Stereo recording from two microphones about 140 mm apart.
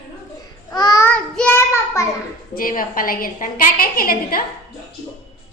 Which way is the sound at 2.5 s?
85° left.